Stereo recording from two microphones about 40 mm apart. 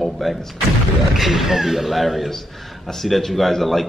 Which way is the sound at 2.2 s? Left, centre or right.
Centre.